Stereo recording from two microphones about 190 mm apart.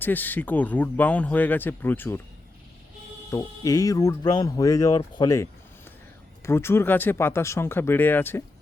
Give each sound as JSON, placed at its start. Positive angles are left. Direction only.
{"t": 0.0, "sound": "a man's voice", "side_deg": 10}
{"t": 3.2, "sound": "a man's voice", "side_deg": 20}